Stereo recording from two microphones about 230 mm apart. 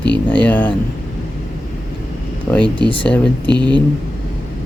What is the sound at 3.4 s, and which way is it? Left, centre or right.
Speech, centre.